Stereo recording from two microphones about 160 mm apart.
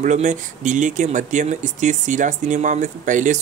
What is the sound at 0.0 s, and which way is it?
Speech, 50° right (ahead or behind).